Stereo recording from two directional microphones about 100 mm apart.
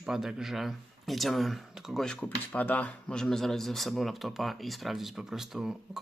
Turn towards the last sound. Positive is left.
turn(degrees=-5)  # may be behind; listen again after turning